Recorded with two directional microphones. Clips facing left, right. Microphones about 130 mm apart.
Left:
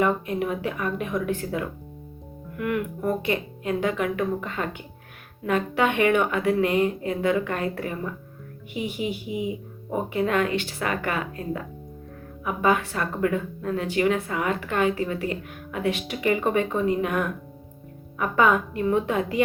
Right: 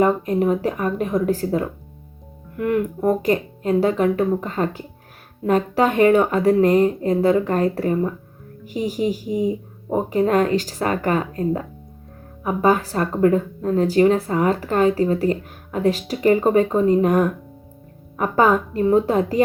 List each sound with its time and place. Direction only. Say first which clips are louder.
0.0 s speech: right 6 dB; 40° right (ahead or behind)